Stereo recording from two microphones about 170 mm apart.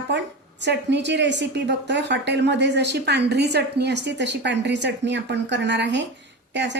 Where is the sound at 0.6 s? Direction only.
90° right.